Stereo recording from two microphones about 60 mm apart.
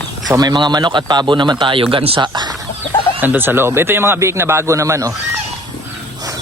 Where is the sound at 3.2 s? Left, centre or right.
Right.